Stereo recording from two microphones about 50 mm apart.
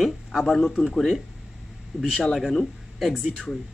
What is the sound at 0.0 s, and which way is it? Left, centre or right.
Speech, centre.